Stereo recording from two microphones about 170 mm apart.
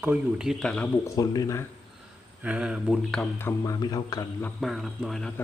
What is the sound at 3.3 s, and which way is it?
Speech, 15° left (ahead or behind).